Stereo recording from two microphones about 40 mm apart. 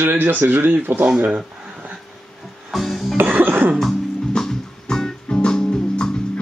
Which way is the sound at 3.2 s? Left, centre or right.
Right.